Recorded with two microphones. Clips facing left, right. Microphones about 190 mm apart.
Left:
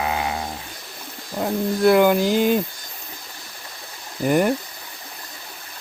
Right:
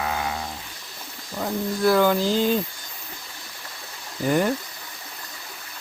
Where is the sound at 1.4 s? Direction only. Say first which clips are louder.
Left 4 dB; 20° left (ahead or behind).